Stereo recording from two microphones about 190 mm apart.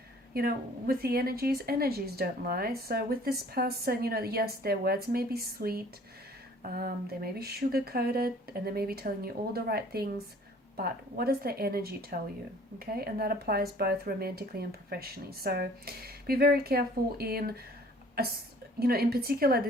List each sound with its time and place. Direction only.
0.3 s speech: 55° right (ahead or behind)